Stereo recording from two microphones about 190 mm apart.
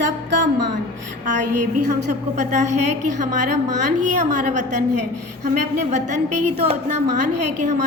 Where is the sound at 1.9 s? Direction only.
40° right (ahead or behind).